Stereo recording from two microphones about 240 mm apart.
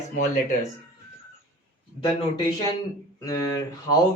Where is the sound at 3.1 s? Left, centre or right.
Centre.